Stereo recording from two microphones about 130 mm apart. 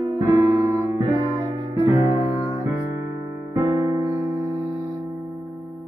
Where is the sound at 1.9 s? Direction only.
25° right (ahead or behind).